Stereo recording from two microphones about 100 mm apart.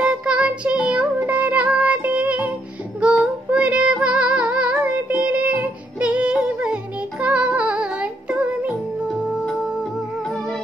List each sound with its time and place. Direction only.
0.0 s music: 10° right (ahead or behind)